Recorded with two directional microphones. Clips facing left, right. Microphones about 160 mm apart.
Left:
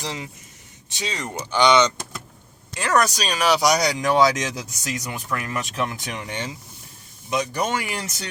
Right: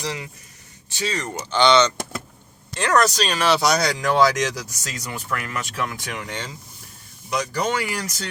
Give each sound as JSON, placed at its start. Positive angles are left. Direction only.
{"t": 0.0, "sound": "speech", "side_deg": 20}